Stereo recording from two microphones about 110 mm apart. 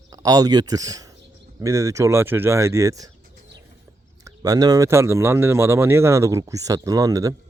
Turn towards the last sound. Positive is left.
turn(degrees=-35)  # may be behind; listen again after turning